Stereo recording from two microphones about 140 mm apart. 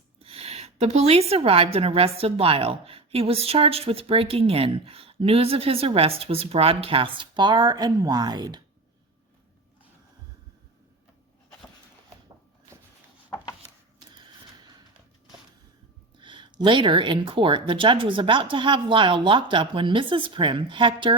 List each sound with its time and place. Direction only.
0.2 s a woman's voice: 45° right (ahead or behind); by 8.6 s 30° right (ahead or behind)
16.2 s speech: 35° right (ahead or behind)